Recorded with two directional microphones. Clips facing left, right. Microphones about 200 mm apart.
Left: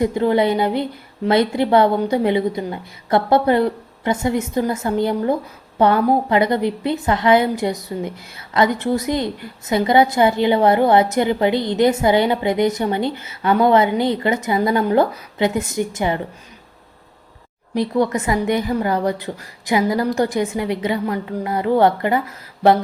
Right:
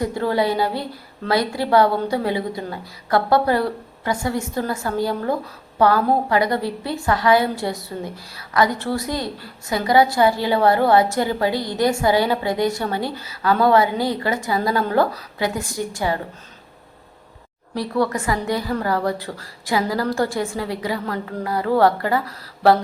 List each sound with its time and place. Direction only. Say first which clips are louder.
0.0 s a woman's voice: left 4 dB; 20° left (ahead or behind)
17.7 s a woman's voice: left 3 dB; 20° left (ahead or behind)